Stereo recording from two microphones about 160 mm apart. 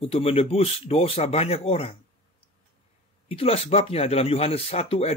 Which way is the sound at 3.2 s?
40° left (ahead or behind).